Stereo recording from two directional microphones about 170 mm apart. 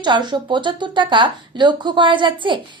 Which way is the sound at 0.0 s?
25° right (ahead or behind).